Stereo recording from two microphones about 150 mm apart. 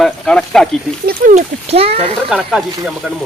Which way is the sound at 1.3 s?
40° right (ahead or behind).